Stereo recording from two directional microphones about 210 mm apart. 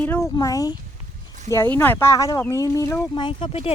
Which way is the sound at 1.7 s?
10° left (ahead or behind).